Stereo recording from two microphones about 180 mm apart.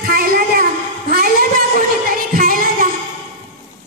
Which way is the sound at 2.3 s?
50° right (ahead or behind).